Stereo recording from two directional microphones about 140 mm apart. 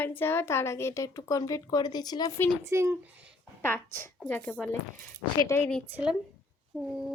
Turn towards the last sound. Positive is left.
turn(degrees=-5)  # may be behind; listen again after turning